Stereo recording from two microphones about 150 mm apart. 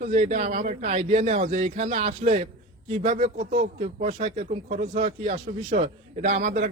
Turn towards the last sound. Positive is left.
turn(degrees=-55)  # may be behind; listen again after turning